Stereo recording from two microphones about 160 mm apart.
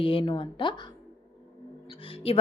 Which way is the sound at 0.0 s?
35° left (ahead or behind).